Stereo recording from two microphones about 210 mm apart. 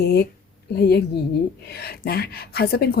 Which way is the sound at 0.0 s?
50° left (ahead or behind).